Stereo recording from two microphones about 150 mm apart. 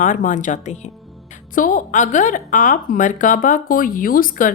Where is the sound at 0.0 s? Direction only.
60° left (ahead or behind).